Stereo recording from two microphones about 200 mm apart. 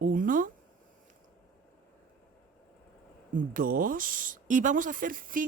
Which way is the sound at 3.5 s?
45° right (ahead or behind).